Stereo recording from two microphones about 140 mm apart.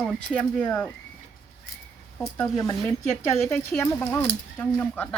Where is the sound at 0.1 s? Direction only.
5° left (ahead or behind).